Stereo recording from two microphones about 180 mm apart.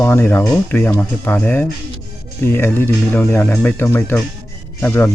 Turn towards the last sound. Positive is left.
turn(degrees=10)  # may be behind; listen again after turning